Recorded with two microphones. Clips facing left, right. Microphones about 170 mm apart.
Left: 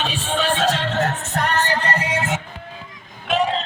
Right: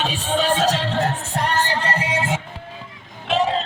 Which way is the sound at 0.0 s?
40° right (ahead or behind).